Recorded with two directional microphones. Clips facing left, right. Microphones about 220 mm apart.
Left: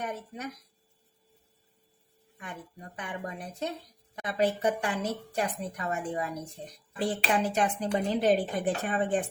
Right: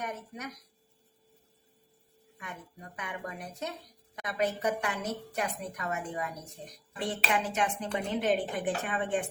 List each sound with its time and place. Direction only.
0.0 s speech: 30° left (ahead or behind)
2.4 s speech: 30° left (ahead or behind)